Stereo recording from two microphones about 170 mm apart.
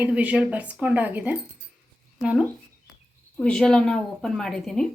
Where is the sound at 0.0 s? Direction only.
10° right (ahead or behind).